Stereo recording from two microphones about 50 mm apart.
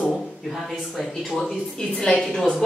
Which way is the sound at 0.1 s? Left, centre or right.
Centre.